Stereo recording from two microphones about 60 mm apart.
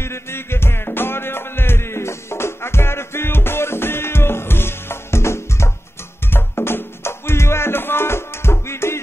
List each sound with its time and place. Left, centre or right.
0.0 s music: left